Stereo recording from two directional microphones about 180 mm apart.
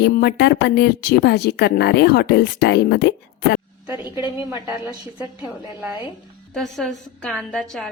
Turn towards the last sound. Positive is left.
turn(degrees=5)  # may be behind; listen again after turning